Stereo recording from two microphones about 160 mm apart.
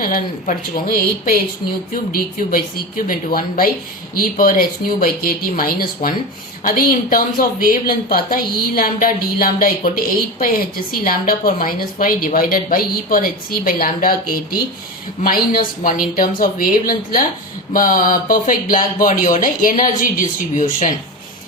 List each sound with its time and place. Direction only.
0.0 s speech: 55° left (ahead or behind)